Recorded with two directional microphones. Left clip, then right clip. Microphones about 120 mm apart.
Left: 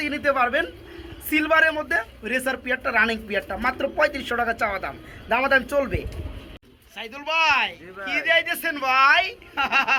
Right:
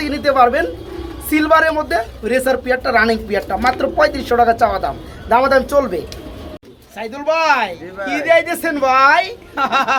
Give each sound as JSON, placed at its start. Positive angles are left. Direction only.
{"t": 0.0, "sound": "a man's voice", "side_deg": 15}
{"t": 5.5, "sound": "speech", "side_deg": 50}
{"t": 7.3, "sound": "speech", "side_deg": -20}